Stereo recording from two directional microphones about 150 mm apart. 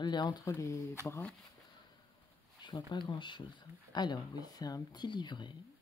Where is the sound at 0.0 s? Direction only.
30° left (ahead or behind).